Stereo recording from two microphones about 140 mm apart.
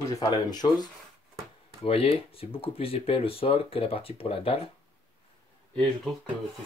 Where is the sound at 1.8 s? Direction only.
45° left (ahead or behind).